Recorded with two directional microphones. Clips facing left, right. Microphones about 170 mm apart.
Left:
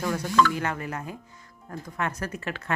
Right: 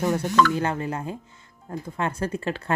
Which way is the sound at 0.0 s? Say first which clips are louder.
Right 3 dB; 25° right (ahead or behind).